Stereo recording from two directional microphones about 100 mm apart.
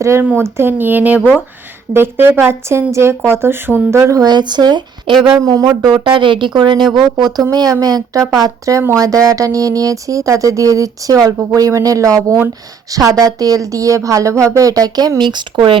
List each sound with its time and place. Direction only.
0.0 s a woman's voice: 25° right (ahead or behind)
4.3 s speech: 45° right (ahead or behind)
5.5 s a woman's voice: 35° right (ahead or behind)
5.9 s a woman's voice: 55° right (ahead or behind)